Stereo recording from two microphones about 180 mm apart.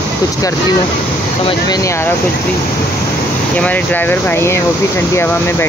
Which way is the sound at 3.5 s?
10° left (ahead or behind).